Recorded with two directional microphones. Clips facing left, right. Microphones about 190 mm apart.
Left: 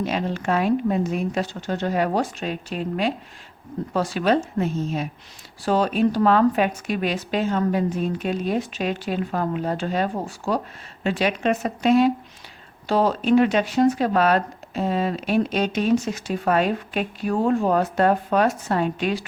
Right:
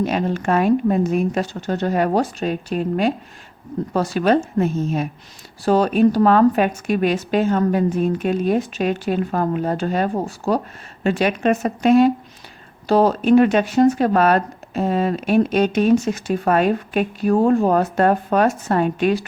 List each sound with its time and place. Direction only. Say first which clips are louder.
0.0 s speech: right 4 dB; 50° right (ahead or behind)